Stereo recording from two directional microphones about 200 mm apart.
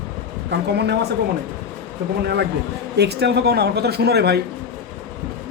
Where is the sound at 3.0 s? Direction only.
55° right (ahead or behind).